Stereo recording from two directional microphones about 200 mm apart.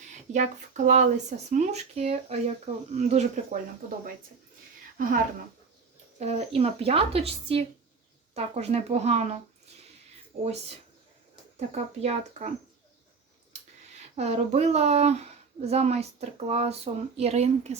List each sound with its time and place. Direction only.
0.1 s speech: 35° right (ahead or behind)
6.1 s a woman's voice: 35° right (ahead or behind)
10.4 s speech: 30° right (ahead or behind)
14.2 s speech: 35° right (ahead or behind)